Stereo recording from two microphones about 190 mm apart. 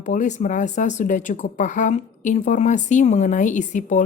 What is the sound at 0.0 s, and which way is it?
Speech, 40° left (ahead or behind).